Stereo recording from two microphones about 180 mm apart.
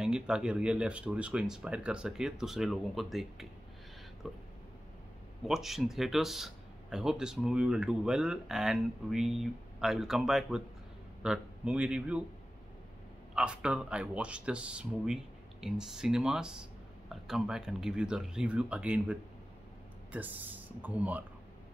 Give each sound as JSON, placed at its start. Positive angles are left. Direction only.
{"t": 0.0, "sound": "speech", "side_deg": -5}
{"t": 5.5, "sound": "speech", "side_deg": 0}
{"t": 13.3, "sound": "speech", "side_deg": -5}